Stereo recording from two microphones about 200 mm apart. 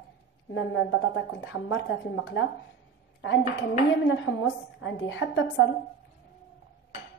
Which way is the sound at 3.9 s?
80° left.